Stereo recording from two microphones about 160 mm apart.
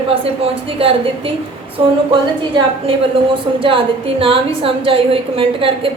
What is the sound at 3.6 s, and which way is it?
A woman's voice, 35° right (ahead or behind).